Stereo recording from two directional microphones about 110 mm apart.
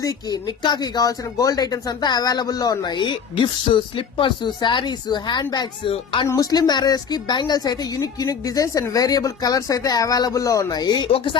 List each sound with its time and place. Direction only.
0.0 s speech: 30° left (ahead or behind)
5.9 s speech: 55° left (ahead or behind)
6.2 s speech: 35° left (ahead or behind)
11.1 s speech: 50° left (ahead or behind)